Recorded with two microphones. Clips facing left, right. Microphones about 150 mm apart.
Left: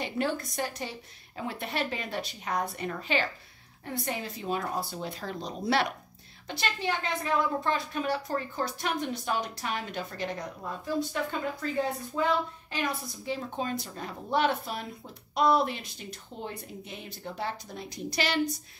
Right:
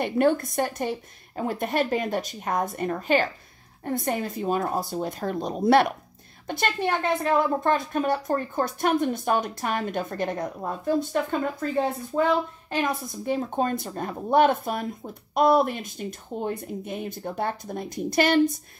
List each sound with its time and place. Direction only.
0.0 s a woman's voice: 55° right (ahead or behind)